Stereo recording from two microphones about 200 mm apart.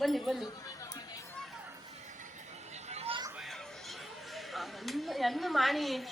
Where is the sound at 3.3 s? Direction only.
Centre (ahead or behind).